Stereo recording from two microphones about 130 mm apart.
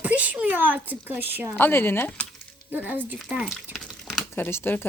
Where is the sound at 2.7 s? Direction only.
15° right (ahead or behind).